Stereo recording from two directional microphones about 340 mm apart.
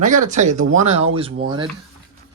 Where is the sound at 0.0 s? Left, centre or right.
Right.